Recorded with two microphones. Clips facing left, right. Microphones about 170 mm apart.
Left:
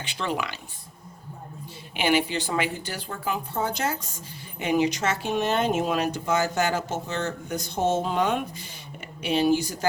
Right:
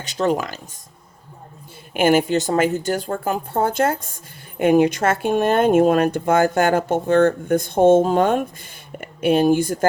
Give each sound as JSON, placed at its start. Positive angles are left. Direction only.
{"t": 0.0, "sound": "speech", "side_deg": -40}
{"t": 1.9, "sound": "speech", "side_deg": -45}